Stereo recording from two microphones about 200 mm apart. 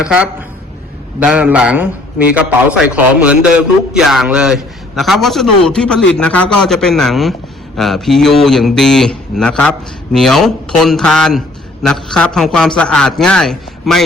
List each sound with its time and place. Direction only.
0.0 s a man's voice: 5° right (ahead or behind)